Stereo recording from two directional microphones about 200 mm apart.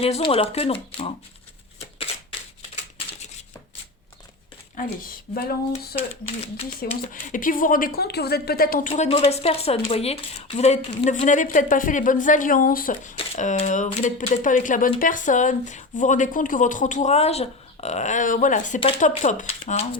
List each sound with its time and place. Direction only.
0.0 s speech: 30° left (ahead or behind)
2.1 s shuffling cards: 30° left (ahead or behind)
5.3 s speech: 50° left (ahead or behind)
6.0 s speech: 30° left (ahead or behind)
7.1 s speech: 40° left (ahead or behind)
9.0 s speech: 30° left (ahead or behind)